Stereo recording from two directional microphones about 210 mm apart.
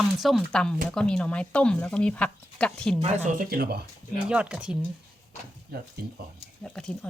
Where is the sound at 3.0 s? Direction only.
35° right (ahead or behind).